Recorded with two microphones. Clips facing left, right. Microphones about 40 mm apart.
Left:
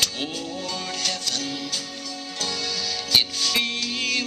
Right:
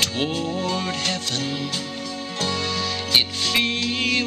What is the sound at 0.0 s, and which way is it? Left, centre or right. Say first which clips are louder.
Music: right 4 dB; right.